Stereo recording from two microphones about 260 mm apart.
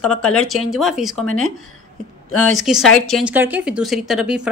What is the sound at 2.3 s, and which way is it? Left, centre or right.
Speech, left.